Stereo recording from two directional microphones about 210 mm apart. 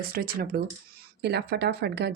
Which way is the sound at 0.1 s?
45° right (ahead or behind).